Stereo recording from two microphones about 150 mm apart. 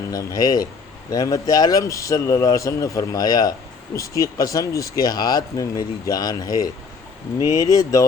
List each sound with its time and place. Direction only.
0.1 s speech: 25° left (ahead or behind)